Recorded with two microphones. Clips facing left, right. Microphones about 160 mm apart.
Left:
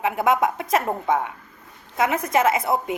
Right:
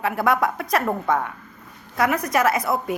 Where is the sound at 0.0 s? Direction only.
20° left (ahead or behind).